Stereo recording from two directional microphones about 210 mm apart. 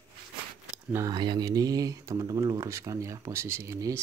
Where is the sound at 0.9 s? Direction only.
15° right (ahead or behind).